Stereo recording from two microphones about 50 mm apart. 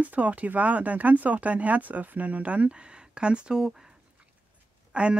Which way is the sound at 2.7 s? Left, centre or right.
Centre.